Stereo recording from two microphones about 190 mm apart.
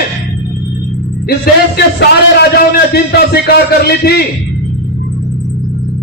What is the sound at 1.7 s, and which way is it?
A man's voice, 60° left (ahead or behind).